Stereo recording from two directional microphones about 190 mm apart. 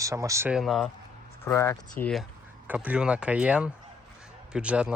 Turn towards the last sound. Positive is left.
turn(degrees=-5)  # may be behind; listen again after turning